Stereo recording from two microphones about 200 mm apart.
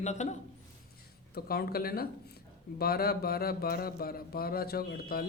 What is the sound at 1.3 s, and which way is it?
Speech, 50° left (ahead or behind).